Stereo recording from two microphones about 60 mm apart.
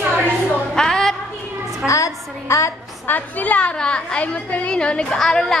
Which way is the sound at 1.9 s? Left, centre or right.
Left.